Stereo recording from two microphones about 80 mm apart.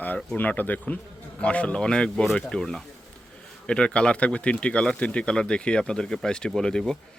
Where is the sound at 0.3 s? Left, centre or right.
Left.